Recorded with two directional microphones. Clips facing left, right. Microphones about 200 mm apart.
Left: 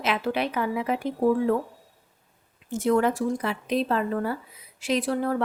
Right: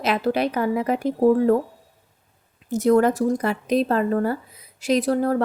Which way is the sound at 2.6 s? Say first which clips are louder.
Right 5 dB; 40° right (ahead or behind).